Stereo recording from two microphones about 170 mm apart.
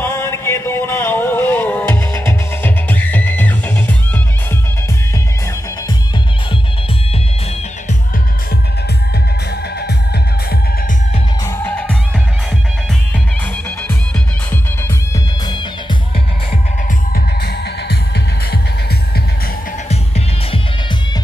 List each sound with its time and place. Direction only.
0.0 s music: 15° left (ahead or behind)
11.4 s music: 15° left (ahead or behind)
15.4 s music: 25° left (ahead or behind)
19.9 s music: 35° left (ahead or behind)